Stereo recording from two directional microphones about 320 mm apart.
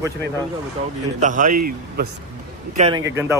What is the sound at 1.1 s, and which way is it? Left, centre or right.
A man's voice, right.